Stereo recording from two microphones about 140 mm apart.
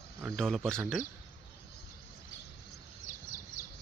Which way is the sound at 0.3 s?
5° left (ahead or behind).